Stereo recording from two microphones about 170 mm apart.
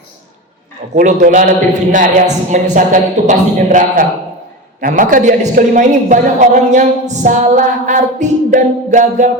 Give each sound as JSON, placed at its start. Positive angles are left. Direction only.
{"t": 0.9, "sound": "a woman's voice", "side_deg": -50}